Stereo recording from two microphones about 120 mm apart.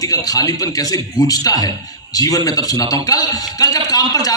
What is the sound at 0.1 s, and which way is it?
A man's voice, 30° left (ahead or behind).